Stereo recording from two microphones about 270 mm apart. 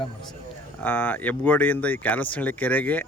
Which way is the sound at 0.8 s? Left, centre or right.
Centre.